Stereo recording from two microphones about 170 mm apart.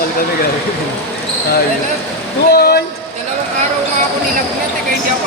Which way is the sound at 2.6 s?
70° left (ahead or behind).